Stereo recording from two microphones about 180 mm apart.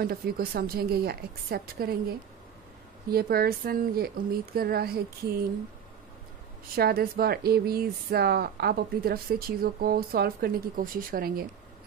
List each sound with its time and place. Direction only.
0.0 s speech: 60° right (ahead or behind)
3.1 s speech: 60° right (ahead or behind)
6.7 s speech: 55° right (ahead or behind)